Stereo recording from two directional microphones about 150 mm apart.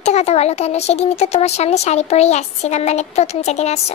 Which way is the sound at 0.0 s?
45° left (ahead or behind).